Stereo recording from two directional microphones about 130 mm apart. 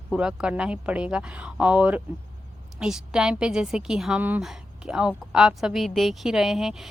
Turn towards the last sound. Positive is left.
turn(degrees=-5)  # may be behind; listen again after turning